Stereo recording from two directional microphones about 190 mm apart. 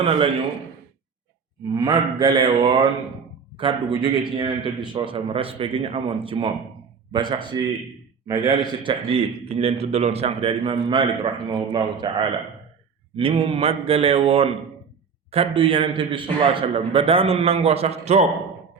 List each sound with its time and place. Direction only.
1.7 s a man's voice: 20° right (ahead or behind)